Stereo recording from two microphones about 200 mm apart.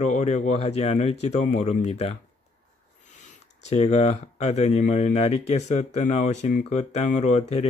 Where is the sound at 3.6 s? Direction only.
35° left (ahead or behind).